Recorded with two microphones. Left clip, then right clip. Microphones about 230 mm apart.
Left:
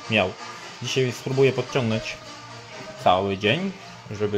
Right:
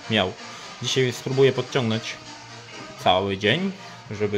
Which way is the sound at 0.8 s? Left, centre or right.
Centre.